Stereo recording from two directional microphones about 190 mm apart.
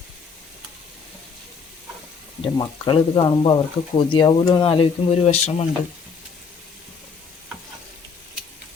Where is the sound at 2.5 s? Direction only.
25° left (ahead or behind).